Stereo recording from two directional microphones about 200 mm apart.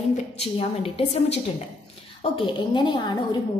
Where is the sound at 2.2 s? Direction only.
25° left (ahead or behind).